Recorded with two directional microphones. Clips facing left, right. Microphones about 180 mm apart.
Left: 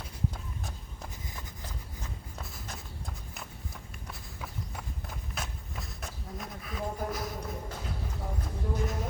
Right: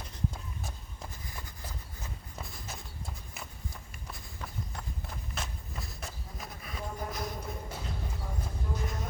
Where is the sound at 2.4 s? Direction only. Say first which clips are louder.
Right 1 dB; centre (ahead or behind).